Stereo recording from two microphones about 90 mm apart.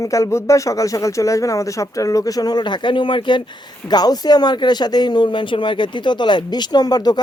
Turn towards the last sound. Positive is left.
turn(degrees=50)  # may be behind; listen again after turning